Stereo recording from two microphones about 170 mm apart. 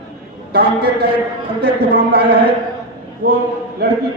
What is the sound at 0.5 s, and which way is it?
A man's voice, 75° right (ahead or behind).